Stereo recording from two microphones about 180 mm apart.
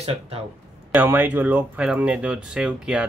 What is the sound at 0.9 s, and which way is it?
Speech, 10° right (ahead or behind).